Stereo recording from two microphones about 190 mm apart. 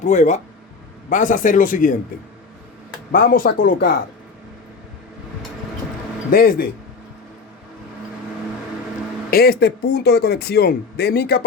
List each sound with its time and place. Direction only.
0.0 s speech: 40° left (ahead or behind)
3.1 s speech: 50° left (ahead or behind)
6.3 s speech: 50° left (ahead or behind)
9.3 s speech: 55° left (ahead or behind)